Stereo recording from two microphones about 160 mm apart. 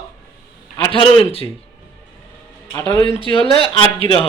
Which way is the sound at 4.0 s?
35° left (ahead or behind).